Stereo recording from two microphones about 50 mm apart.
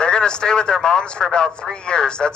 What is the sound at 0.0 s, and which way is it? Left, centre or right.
A man's voice, centre.